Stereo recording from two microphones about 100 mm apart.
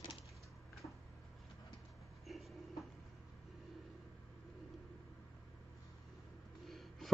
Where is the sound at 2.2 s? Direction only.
Centre (ahead or behind).